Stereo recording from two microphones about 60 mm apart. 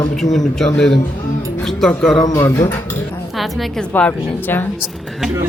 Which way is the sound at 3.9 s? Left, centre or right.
Left.